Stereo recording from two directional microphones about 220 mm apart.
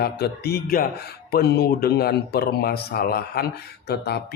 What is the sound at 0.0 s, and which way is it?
Speech, 45° left (ahead or behind).